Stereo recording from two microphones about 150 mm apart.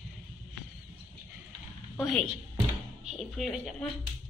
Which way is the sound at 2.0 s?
Centre (ahead or behind).